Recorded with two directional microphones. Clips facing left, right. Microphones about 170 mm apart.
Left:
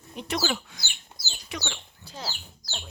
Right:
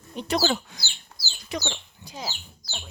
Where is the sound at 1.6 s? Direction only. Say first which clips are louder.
Right 4 dB; 15° right (ahead or behind).